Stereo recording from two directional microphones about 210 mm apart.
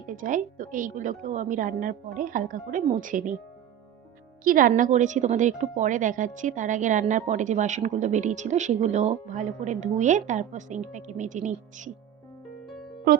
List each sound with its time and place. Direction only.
0.1 s a woman's voice: 40° right (ahead or behind)
4.4 s a woman's voice: 40° right (ahead or behind)